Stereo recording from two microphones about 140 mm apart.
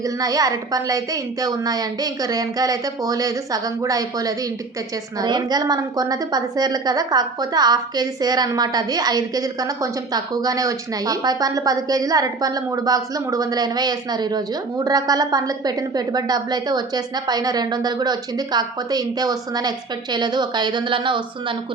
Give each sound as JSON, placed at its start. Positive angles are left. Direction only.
{"t": 0.0, "sound": "a woman's voice", "side_deg": -25}